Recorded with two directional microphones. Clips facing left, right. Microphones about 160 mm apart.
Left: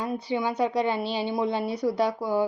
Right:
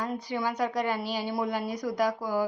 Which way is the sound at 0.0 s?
25° left (ahead or behind).